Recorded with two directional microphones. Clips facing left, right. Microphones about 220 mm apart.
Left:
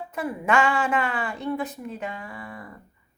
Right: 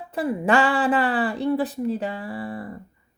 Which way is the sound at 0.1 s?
30° right (ahead or behind).